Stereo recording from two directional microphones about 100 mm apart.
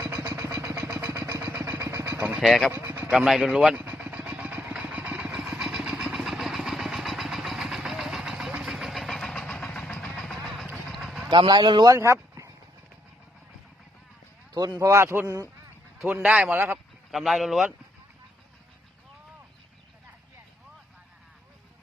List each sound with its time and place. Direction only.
0.5 s a sound: 35° right (ahead or behind)
1.1 s vehicle: 40° right (ahead or behind)
1.5 s vehicle: 30° right (ahead or behind)
2.1 s speech: 10° right (ahead or behind)
2.7 s vehicle: 20° right (ahead or behind)
3.1 s speech: 5° right (ahead or behind)
3.8 s vehicle: 15° right (ahead or behind)
11.3 s speech: 50° right (ahead or behind)
11.9 s a sound: 30° right (ahead or behind)
14.5 s speech: 45° right (ahead or behind)
14.8 s a man's voice: 30° right (ahead or behind)
16.2 s a man's voice: 10° right (ahead or behind)
17.1 s speech: centre (ahead or behind)